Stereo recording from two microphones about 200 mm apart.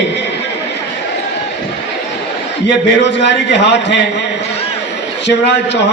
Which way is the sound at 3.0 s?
60° left (ahead or behind).